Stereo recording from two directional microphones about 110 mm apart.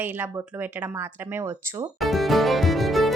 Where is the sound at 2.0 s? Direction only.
Centre (ahead or behind).